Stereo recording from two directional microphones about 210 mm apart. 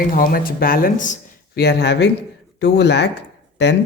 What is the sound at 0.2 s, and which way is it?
Speech, 45° left (ahead or behind).